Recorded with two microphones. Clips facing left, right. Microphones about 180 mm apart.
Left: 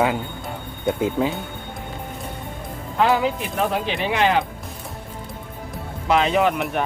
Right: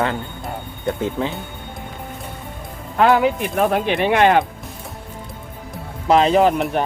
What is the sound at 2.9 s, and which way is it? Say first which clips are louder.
Speech: right 4 dB; 60° right (ahead or behind).